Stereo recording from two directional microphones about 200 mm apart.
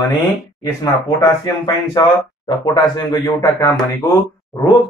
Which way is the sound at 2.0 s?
25° left (ahead or behind).